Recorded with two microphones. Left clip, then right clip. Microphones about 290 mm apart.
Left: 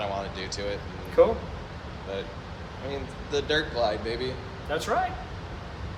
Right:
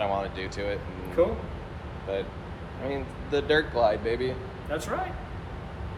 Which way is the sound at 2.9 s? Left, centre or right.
Right.